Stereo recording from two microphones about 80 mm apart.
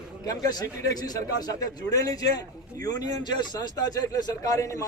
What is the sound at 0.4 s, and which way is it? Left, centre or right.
A man's voice, left.